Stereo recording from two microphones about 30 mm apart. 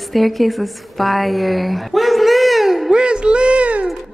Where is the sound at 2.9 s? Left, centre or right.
Right.